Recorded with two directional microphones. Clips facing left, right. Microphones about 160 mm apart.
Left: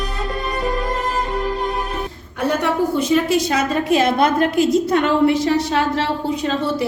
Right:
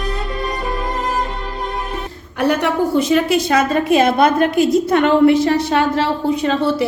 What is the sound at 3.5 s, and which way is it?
A woman's voice, 60° right (ahead or behind).